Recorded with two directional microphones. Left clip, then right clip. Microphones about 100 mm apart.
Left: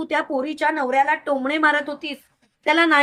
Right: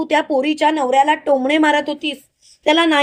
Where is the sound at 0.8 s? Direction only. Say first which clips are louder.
Right 5 dB; 65° right (ahead or behind).